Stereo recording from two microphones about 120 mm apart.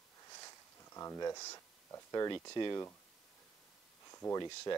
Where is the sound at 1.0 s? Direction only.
25° left (ahead or behind).